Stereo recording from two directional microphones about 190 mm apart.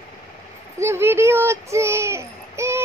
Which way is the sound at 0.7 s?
15° right (ahead or behind).